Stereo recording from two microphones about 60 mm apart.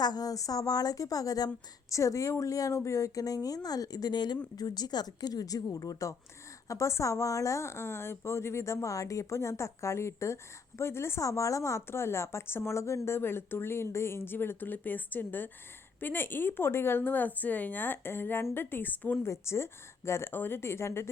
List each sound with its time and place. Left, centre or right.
0.1 s speech: left
1.9 s speech: left
6.7 s speech: left
11.2 s a woman's voice: left
19.2 s speech: left